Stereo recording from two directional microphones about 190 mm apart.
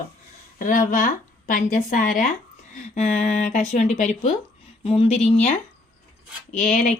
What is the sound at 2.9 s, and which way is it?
A woman's voice, 35° left (ahead or behind).